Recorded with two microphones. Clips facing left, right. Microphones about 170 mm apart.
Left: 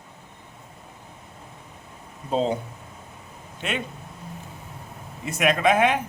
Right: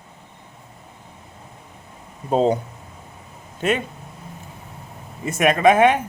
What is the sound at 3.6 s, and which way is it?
Speech, 45° right (ahead or behind).